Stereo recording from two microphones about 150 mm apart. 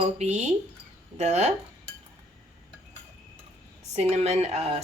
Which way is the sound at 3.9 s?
45° right (ahead or behind).